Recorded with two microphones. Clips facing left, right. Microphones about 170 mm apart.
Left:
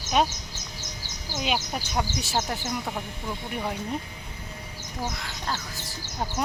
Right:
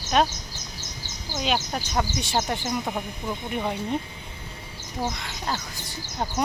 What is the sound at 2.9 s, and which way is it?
Speech, 15° right (ahead or behind).